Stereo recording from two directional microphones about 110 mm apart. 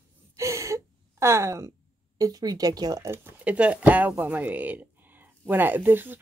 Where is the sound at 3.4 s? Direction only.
10° right (ahead or behind).